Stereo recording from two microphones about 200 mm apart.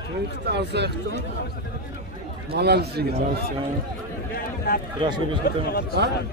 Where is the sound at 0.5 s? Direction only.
55° right (ahead or behind).